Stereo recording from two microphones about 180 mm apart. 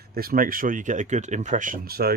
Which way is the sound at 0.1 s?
55° right (ahead or behind).